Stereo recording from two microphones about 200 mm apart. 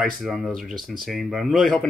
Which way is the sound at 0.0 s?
Centre (ahead or behind).